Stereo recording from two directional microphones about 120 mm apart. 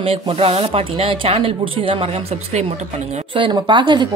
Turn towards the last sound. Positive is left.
turn(degrees=-40)  # may be behind; listen again after turning